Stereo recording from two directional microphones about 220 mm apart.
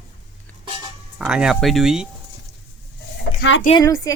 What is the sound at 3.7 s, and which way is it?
Speech, 15° left (ahead or behind).